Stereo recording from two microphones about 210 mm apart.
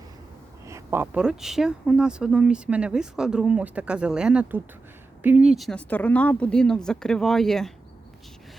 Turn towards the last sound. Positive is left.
turn(degrees=0)  # may be behind; listen again after turning